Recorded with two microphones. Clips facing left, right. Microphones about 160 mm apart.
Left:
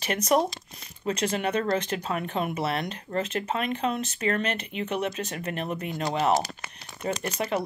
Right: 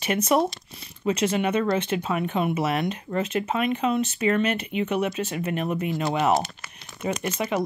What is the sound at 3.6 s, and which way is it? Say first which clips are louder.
Speech: right 6 dB; 35° left (ahead or behind).